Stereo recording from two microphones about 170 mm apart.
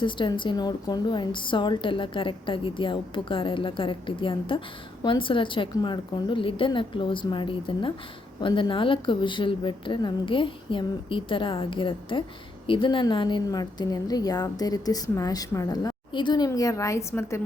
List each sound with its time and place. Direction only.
0.0 s a woman's voice: 30° left (ahead or behind)